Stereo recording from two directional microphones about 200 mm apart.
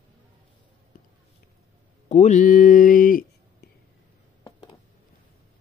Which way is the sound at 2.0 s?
35° left (ahead or behind).